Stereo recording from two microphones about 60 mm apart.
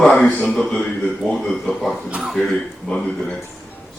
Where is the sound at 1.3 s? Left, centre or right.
Centre.